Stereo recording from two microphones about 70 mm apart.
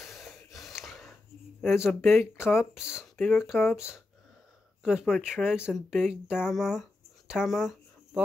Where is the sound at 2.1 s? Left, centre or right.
Left.